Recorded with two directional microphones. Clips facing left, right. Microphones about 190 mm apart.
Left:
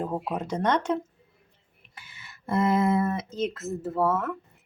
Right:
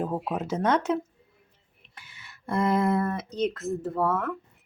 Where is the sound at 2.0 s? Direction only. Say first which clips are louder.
Left 2 dB; centre (ahead or behind).